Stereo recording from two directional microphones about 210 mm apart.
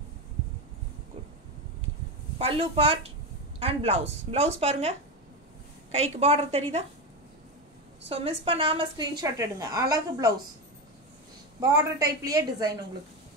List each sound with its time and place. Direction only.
2.3 s a woman's voice: 25° right (ahead or behind)
8.1 s a woman's voice: 25° right (ahead or behind)
11.7 s a woman's voice: 15° right (ahead or behind)